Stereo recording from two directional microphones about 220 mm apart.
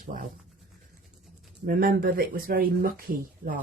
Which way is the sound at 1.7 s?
40° right (ahead or behind).